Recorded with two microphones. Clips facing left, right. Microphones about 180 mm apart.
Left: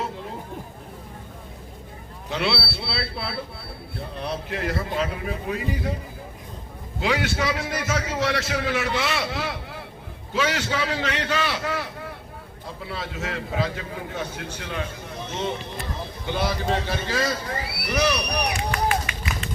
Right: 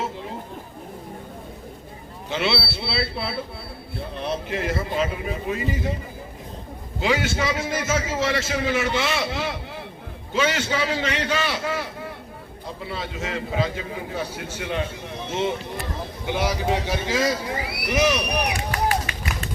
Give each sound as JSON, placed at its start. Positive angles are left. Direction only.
{"t": 0.0, "sound": "chatter", "side_deg": 0}
{"t": 2.3, "sound": "a man's voice", "side_deg": 0}
{"t": 7.0, "sound": "a man's voice", "side_deg": 0}
{"t": 18.7, "sound": "run", "side_deg": -35}